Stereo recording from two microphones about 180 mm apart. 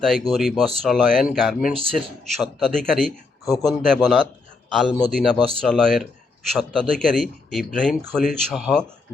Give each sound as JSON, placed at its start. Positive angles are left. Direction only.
{"t": 0.0, "sound": "a man's voice", "side_deg": 0}
{"t": 1.7, "sound": "speech", "side_deg": -30}
{"t": 2.0, "sound": "a man's voice", "side_deg": 0}